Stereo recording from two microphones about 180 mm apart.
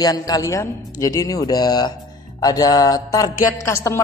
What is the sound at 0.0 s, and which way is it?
A man's voice, 20° left (ahead or behind).